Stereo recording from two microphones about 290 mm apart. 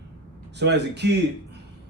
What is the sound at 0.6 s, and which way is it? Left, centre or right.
Speech, right.